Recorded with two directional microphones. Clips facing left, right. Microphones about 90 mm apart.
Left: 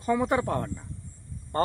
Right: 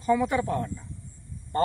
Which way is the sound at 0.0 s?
45° left (ahead or behind).